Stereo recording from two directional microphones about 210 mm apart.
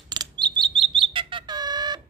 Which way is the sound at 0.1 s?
20° right (ahead or behind).